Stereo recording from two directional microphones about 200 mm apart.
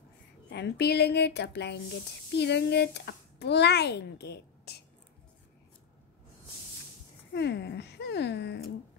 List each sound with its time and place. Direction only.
0.5 s a child's voice: 55° left (ahead or behind)
7.3 s a child's voice: 60° left (ahead or behind)